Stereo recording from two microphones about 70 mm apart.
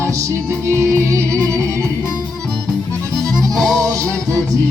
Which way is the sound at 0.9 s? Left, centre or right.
Right.